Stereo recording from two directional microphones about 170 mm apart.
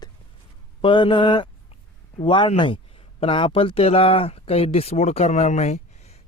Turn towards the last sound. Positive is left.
turn(degrees=40)  # may be behind; listen again after turning